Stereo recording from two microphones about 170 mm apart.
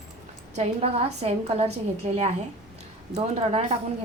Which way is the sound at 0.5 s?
35° right (ahead or behind).